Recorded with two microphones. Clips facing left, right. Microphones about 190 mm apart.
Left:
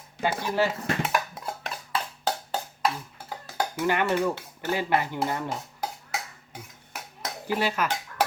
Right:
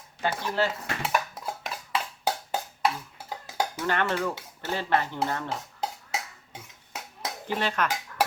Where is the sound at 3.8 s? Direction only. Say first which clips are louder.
Left 4 dB; 10° left (ahead or behind).